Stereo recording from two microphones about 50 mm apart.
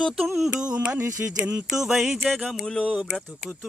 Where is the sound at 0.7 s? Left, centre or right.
Right.